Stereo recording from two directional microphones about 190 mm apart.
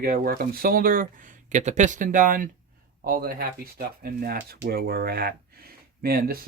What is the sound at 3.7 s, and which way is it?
Speech, 50° right (ahead or behind).